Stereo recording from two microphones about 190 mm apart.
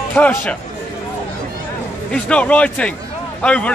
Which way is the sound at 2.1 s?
5° left (ahead or behind).